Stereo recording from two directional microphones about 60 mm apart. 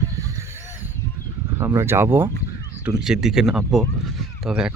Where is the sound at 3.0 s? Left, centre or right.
Centre.